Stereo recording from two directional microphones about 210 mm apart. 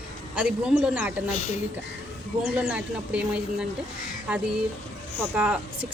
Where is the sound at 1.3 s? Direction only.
30° left (ahead or behind).